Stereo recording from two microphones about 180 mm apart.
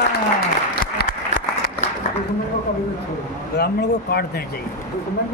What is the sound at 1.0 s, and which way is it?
Applause, 60° left (ahead or behind).